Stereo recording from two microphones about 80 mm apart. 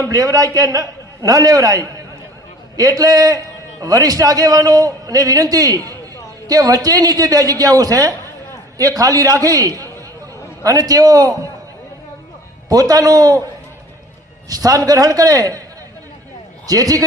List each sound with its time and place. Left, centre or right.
0.0 s a man's voice: right
12.6 s a man's voice: right
14.5 s a man's voice: right
16.6 s a man's voice: right